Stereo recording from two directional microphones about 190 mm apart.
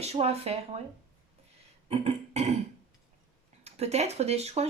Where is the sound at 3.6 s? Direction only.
35° right (ahead or behind).